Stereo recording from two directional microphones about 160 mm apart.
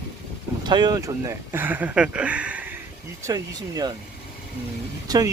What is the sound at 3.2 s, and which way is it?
Speech, 20° right (ahead or behind).